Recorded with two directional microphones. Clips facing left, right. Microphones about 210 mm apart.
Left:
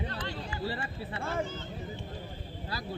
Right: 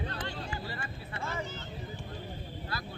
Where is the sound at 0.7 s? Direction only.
35° left (ahead or behind).